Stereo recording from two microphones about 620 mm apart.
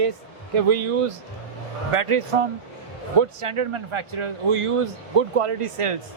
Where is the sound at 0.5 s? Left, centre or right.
Right.